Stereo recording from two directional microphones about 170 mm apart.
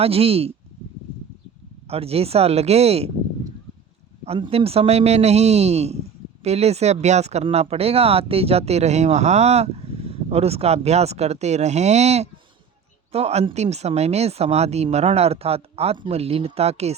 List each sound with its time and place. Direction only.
0.0 s speech: 35° right (ahead or behind)
1.9 s speech: 35° right (ahead or behind)
4.3 s speech: 35° right (ahead or behind)